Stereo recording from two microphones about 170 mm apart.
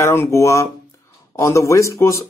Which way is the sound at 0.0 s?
15° left (ahead or behind).